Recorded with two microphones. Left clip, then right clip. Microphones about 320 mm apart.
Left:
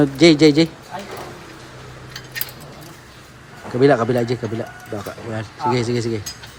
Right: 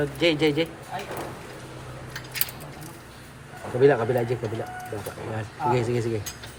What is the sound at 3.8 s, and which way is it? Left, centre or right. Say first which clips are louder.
Speech: left 5 dB; centre.